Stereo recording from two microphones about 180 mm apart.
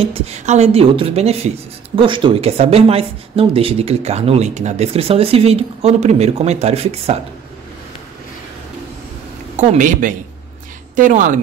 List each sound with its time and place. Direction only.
0.0 s speech: 35° right (ahead or behind)
9.6 s speech: 45° right (ahead or behind)